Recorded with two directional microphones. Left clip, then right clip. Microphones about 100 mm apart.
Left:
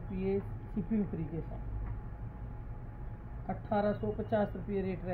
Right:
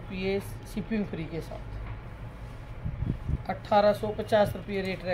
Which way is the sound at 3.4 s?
30° right (ahead or behind).